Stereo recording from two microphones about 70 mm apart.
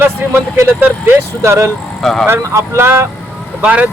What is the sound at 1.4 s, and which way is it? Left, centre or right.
Speech, right.